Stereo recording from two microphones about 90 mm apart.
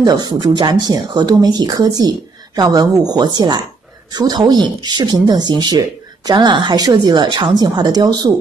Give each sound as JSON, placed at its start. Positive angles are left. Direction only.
{"t": 0.0, "sound": "speech", "side_deg": -50}